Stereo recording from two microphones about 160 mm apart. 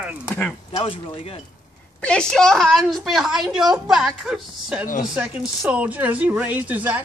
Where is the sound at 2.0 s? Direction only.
5° left (ahead or behind).